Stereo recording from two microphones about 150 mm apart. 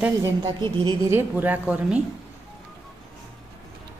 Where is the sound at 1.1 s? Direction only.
15° right (ahead or behind).